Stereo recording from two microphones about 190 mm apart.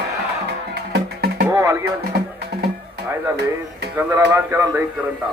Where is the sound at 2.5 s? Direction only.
60° right (ahead or behind).